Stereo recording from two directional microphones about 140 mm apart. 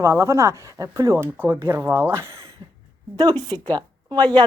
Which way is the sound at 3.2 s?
30° right (ahead or behind).